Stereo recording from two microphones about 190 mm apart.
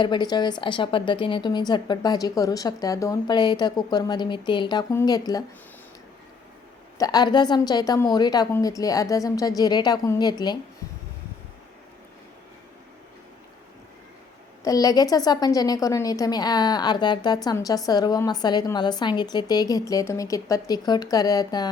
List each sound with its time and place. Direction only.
0.0 s a woman's voice: 25° left (ahead or behind)
7.0 s a woman's voice: 20° left (ahead or behind)
14.6 s a woman's voice: 20° left (ahead or behind)